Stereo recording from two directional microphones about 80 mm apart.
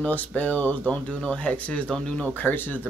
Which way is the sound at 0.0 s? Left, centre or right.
Centre.